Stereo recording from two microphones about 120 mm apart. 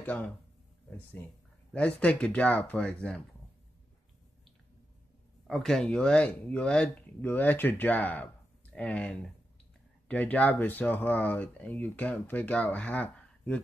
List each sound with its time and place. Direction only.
0.0 s speech: 15° left (ahead or behind)
5.5 s speech: 5° left (ahead or behind)